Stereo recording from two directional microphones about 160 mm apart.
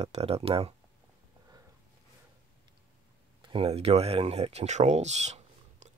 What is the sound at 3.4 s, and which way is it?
Speech, 35° right (ahead or behind).